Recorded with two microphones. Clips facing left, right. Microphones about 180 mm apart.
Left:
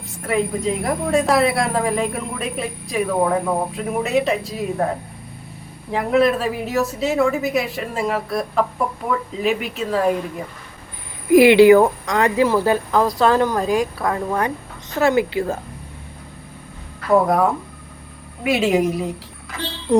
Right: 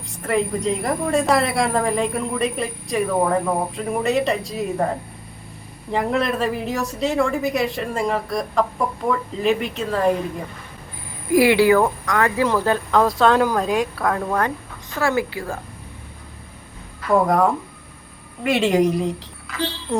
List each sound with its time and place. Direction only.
0.2 s a woman's voice: centre (ahead or behind)
11.3 s a woman's voice: 20° left (ahead or behind)
14.9 s speech: 20° left (ahead or behind)
17.2 s a woman's voice: centre (ahead or behind)